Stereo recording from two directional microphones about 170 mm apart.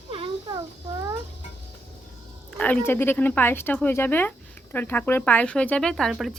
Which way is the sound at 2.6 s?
10° left (ahead or behind).